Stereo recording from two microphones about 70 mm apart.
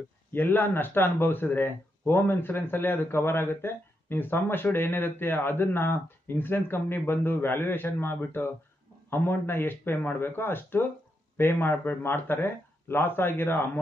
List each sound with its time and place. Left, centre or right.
0.3 s speech: left